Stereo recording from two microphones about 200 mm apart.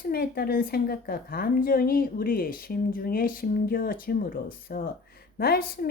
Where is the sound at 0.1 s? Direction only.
50° left (ahead or behind).